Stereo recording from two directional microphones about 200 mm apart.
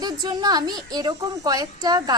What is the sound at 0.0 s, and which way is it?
A woman's voice, 20° right (ahead or behind).